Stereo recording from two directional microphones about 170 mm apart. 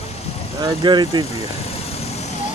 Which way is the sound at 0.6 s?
25° right (ahead or behind).